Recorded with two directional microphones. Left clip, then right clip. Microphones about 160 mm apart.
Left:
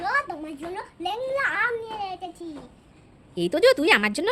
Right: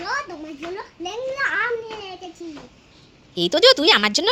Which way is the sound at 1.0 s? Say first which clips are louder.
Right 1 dB; 35° left (ahead or behind).